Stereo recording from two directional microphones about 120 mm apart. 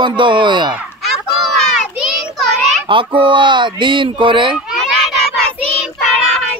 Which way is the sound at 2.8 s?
45° right (ahead or behind).